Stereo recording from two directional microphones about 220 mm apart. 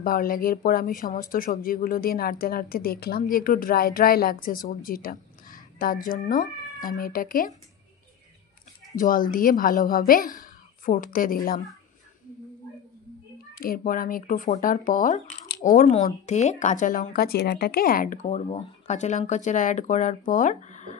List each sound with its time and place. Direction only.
0.0 s speech: 40° left (ahead or behind)
8.9 s speech: 40° left (ahead or behind)
13.6 s speech: 40° left (ahead or behind)